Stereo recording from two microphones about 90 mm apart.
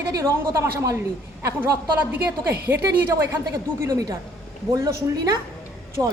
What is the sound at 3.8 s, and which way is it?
Speech, 40° right (ahead or behind).